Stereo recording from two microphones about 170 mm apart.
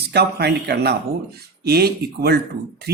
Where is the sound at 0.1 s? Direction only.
75° right (ahead or behind).